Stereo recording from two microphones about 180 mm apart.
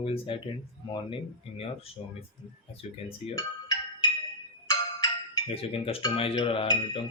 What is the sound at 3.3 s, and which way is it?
Music, 20° left (ahead or behind).